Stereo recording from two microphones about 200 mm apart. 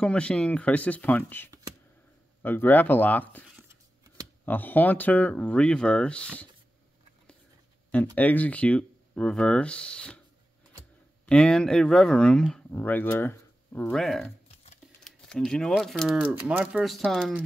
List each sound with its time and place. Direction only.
0.0 s speech: 5° left (ahead or behind)
3.5 s a sound: 15° right (ahead or behind)
4.5 s speech: 10° left (ahead or behind)
7.9 s speech: 5° left (ahead or behind)
11.2 s speech: 5° left (ahead or behind)